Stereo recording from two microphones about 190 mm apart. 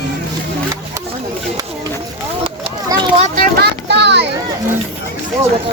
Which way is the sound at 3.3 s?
60° right (ahead or behind).